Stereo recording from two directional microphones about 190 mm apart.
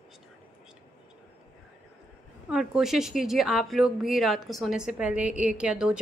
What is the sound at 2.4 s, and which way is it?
A woman's voice, 5° right (ahead or behind).